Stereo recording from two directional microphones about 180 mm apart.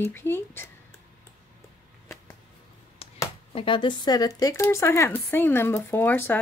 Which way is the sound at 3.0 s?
35° left (ahead or behind).